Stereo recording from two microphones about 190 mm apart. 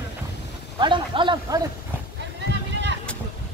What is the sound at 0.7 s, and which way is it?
Speech, 25° right (ahead or behind).